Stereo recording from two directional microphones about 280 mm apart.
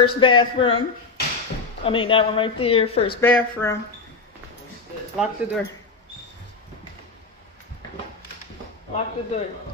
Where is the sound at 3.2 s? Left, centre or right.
Centre.